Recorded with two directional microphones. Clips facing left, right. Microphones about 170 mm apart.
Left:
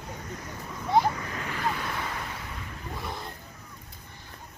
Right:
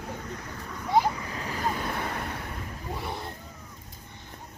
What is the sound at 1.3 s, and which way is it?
Waves, 35° right (ahead or behind).